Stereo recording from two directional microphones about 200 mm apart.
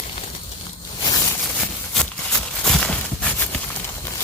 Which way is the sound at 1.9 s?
Centre (ahead or behind).